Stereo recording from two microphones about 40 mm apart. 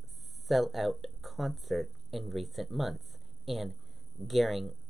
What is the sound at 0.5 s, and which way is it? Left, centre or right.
Speech, centre.